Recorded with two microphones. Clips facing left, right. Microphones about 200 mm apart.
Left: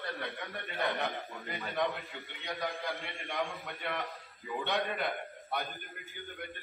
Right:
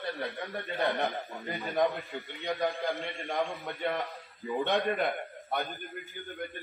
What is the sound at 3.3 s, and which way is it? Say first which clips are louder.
Speech: right 4 dB; 35° right (ahead or behind).